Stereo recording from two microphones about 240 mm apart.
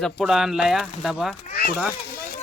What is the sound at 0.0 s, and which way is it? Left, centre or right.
Speech, centre.